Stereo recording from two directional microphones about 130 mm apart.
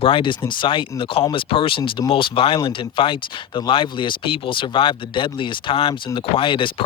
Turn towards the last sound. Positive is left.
turn(degrees=40)  # may be behind; listen again after turning